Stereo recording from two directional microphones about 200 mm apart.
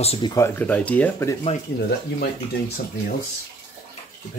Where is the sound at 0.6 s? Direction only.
5° left (ahead or behind).